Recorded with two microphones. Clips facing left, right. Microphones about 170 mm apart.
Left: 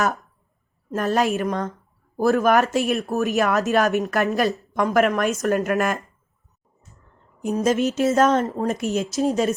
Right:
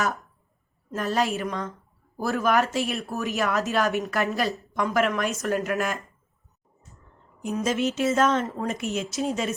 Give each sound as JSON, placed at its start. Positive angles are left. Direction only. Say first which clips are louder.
{"t": 0.9, "sound": "speech", "louder": "left 4 dB", "side_deg": 50}
{"t": 7.4, "sound": "speech", "louder": "left 5 dB", "side_deg": 40}